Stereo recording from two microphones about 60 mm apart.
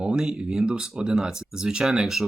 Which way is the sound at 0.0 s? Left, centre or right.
Centre.